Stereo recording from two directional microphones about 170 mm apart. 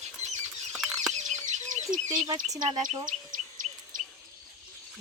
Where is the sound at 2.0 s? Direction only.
25° right (ahead or behind).